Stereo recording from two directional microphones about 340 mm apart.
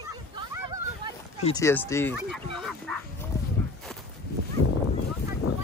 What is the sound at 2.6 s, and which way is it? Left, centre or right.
Bow-wow, centre.